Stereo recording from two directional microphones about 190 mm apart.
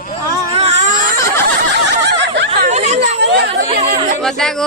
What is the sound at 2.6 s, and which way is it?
Chatter, 35° right (ahead or behind).